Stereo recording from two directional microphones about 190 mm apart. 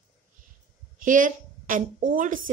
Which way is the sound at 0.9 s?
45° right (ahead or behind).